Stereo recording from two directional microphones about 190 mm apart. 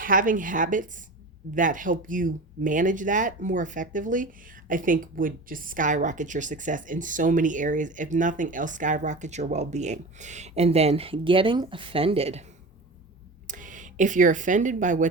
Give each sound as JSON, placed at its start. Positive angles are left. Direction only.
{"t": 0.0, "sound": "speech", "side_deg": -45}
{"t": 13.5, "sound": "speech", "side_deg": -45}